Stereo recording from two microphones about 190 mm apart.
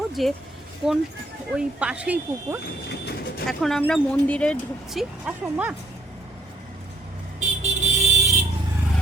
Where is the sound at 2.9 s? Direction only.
60° left (ahead or behind).